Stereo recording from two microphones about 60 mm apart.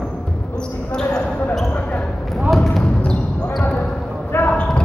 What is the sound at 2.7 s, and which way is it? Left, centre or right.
Basketball bounce, centre.